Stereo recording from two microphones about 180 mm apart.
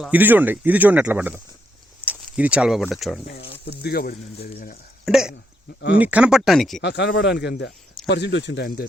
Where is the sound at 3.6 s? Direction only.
65° left (ahead or behind).